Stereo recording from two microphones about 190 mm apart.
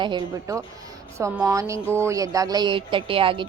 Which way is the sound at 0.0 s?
25° right (ahead or behind).